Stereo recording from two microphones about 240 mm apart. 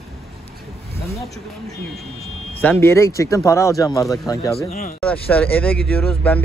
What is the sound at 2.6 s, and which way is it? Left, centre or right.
Speech, centre.